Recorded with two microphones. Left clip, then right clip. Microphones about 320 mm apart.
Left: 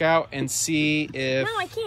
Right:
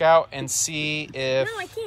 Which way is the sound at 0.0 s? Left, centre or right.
Centre.